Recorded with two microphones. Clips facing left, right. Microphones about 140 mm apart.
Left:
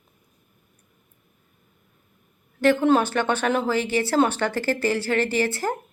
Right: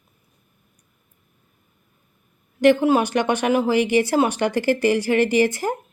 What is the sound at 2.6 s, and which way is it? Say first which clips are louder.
Speech: right 2 dB; 15° right (ahead or behind).